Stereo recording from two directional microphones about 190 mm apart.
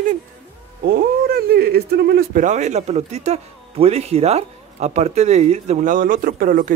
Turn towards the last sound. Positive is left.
turn(degrees=-45)  # may be behind; listen again after turning